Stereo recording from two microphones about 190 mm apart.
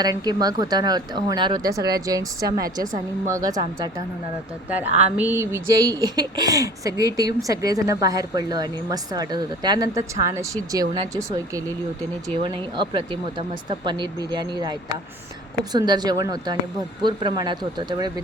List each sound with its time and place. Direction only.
0.0 s a woman's voice: 20° right (ahead or behind)
4.7 s a woman's voice: 10° right (ahead or behind)